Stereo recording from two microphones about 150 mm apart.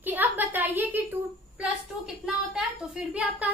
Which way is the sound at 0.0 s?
10° right (ahead or behind).